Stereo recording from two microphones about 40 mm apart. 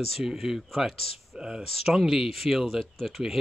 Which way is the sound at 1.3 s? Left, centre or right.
Centre.